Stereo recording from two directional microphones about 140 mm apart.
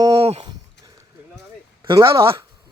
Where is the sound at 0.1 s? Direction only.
45° right (ahead or behind).